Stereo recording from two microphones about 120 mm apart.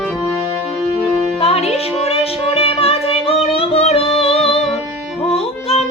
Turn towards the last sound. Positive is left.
turn(degrees=55)  # may be behind; listen again after turning